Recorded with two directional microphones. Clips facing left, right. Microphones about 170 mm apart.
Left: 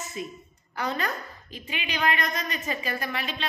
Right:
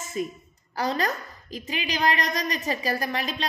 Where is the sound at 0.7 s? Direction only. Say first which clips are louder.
Right 3 dB; 35° right (ahead or behind).